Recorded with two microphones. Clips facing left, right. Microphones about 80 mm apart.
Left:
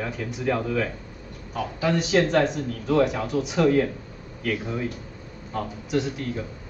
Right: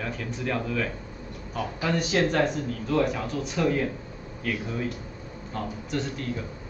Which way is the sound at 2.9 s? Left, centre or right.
Left.